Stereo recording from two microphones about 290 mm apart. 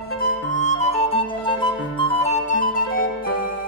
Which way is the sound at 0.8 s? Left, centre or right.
Left.